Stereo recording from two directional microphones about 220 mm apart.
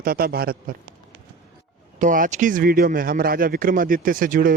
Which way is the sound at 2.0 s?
35° right (ahead or behind).